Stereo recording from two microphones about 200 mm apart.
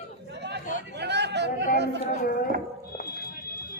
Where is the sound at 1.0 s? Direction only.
55° right (ahead or behind).